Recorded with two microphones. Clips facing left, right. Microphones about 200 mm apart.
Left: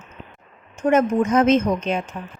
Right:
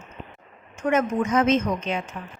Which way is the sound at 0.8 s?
45° left (ahead or behind).